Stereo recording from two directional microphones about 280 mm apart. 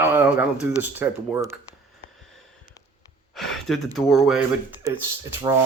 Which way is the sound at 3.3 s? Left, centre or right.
Centre.